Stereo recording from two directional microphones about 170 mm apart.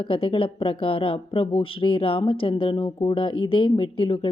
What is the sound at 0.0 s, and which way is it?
Speech, 35° left (ahead or behind).